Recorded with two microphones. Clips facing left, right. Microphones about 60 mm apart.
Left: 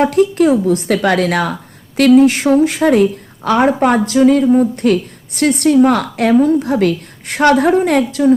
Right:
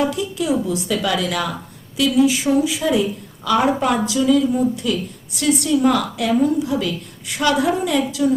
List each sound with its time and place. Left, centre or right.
0.0 s a woman's voice: left